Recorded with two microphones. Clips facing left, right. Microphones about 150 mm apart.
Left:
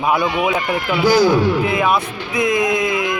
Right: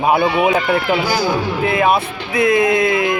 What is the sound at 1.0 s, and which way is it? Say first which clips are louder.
Speech: left 5 dB; 5° right (ahead or behind).